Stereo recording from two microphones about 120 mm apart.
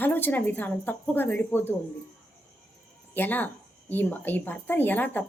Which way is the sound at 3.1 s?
15° left (ahead or behind).